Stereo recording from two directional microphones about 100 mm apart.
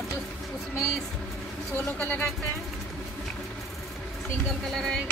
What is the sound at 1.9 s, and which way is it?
Speech, 15° left (ahead or behind).